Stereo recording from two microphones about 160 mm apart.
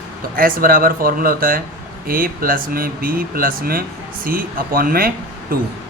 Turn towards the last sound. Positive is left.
turn(degrees=-65)  # may be behind; listen again after turning